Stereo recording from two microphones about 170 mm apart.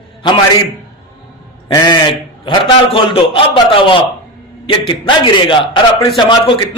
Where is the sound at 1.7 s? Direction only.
25° left (ahead or behind).